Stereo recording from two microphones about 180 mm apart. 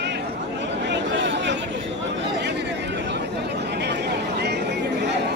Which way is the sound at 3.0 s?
70° right (ahead or behind).